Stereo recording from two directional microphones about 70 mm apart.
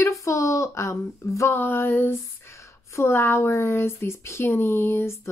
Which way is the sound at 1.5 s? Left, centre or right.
Left.